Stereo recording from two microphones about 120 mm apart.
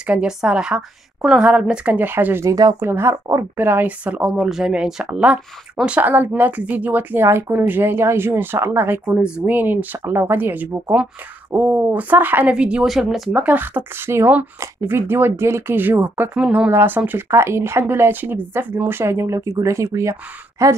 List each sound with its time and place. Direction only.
0.0 s speech: 10° right (ahead or behind); by 20.7 s 25° right (ahead or behind)